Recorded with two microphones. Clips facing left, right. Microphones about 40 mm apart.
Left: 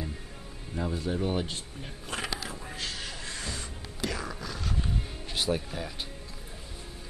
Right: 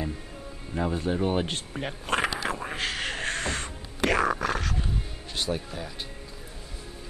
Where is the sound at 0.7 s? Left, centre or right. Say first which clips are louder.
Right 4 dB; right.